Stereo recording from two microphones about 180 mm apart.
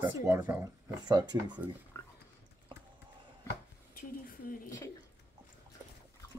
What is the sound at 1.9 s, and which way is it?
Pig, 15° left (ahead or behind).